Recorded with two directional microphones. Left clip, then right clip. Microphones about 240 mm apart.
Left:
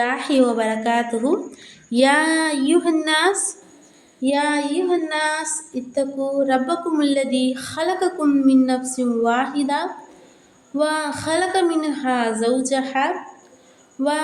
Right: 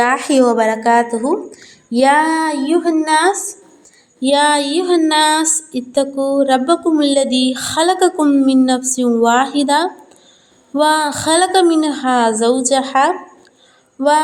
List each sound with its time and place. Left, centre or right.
0.0 s a woman's voice: right
4.2 s a sound: right
10.8 s a woman's voice: right